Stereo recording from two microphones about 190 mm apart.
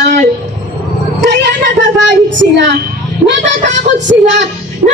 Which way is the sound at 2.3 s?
65° right (ahead or behind).